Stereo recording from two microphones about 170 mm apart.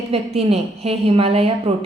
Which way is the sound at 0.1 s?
35° right (ahead or behind).